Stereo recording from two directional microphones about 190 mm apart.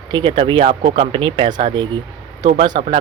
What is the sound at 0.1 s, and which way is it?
Speech, 25° right (ahead or behind).